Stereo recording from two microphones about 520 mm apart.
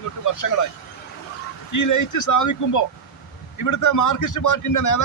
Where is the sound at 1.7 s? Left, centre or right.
Left.